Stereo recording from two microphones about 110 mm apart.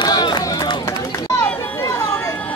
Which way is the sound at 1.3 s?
30° left (ahead or behind).